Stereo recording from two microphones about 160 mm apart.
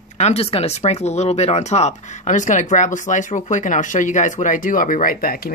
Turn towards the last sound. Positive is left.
turn(degrees=65)  # may be behind; listen again after turning